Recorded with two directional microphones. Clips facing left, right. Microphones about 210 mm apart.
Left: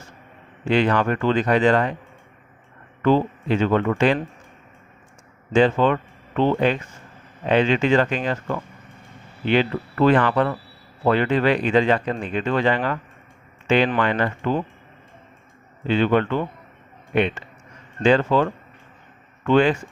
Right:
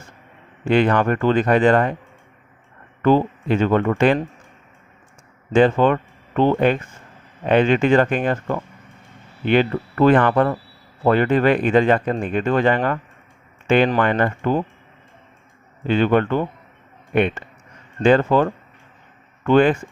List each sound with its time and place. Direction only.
0.7 s speech: 50° right (ahead or behind)
3.0 s speech: 50° right (ahead or behind)
5.5 s speech: 50° right (ahead or behind)
15.9 s speech: 50° right (ahead or behind)
19.5 s speech: 50° right (ahead or behind)